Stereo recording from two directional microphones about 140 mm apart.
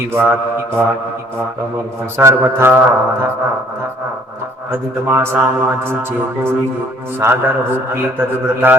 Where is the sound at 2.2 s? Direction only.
20° right (ahead or behind).